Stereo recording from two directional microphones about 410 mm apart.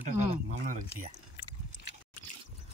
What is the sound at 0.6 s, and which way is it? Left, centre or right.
Speech, centre.